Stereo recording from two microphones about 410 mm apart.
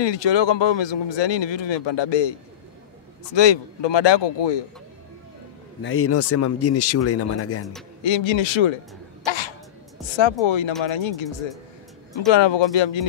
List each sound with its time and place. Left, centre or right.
0.0 s speech: left
3.3 s speech: left
5.8 s speech: left
8.0 s speech: left
9.2 s sneeze: left
10.4 s speech: left
12.3 s speech: left